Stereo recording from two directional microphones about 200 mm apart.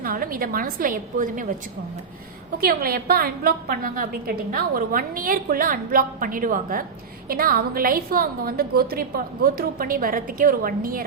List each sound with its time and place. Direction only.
0.0 s a woman's voice: 45° right (ahead or behind)
2.6 s a woman's voice: 50° right (ahead or behind)